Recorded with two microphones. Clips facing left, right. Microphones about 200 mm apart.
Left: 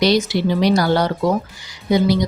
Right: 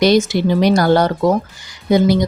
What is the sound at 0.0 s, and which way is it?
Speech, 50° right (ahead or behind).